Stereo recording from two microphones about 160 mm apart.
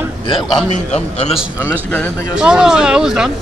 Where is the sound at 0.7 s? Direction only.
45° left (ahead or behind).